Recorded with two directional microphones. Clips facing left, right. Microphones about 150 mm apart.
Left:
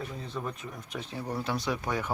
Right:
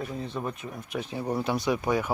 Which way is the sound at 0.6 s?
5° right (ahead or behind).